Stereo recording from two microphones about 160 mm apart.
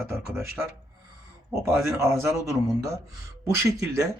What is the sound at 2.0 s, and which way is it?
A man's voice, 15° right (ahead or behind).